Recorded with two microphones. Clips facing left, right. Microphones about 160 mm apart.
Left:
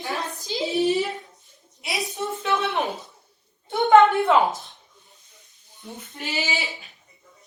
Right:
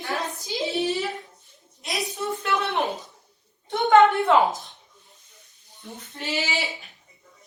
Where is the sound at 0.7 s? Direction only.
Centre (ahead or behind).